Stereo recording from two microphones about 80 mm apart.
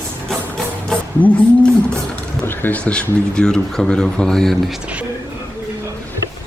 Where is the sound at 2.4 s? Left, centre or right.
Left; by 4.7 s centre.